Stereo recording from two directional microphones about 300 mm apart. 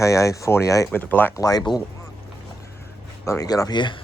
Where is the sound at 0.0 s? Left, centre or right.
Centre.